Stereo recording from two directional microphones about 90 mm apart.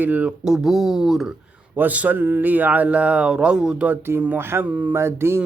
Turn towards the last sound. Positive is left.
turn(degrees=-30)  # may be behind; listen again after turning